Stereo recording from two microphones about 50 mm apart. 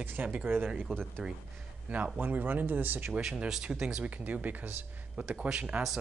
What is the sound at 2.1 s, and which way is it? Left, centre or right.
Speech, right.